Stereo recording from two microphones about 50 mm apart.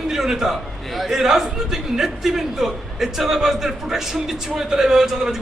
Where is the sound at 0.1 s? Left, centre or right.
Centre.